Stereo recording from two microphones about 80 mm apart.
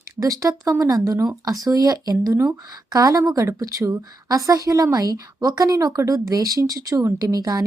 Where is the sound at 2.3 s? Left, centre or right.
Right.